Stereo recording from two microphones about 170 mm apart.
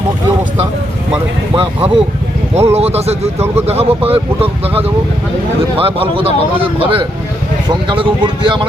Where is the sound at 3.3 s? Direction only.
15° right (ahead or behind).